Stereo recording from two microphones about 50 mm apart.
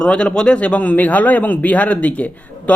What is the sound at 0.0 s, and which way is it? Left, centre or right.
Speech, left.